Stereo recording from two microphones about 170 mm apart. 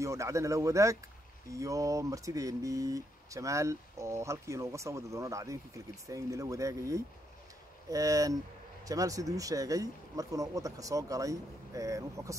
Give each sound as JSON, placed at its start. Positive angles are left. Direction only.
{"t": 0.0, "sound": "speech", "side_deg": -15}